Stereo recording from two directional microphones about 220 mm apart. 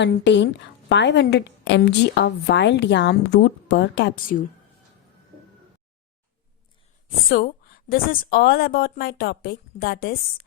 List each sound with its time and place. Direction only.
0.0 s a woman's voice: 50° left (ahead or behind)
7.3 s a woman's voice: 40° left (ahead or behind)